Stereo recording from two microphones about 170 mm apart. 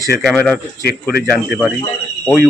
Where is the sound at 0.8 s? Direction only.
70° left (ahead or behind).